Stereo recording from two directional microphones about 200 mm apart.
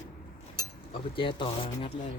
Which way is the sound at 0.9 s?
25° left (ahead or behind).